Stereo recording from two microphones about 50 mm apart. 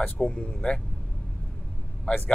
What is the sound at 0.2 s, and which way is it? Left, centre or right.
Speech, left.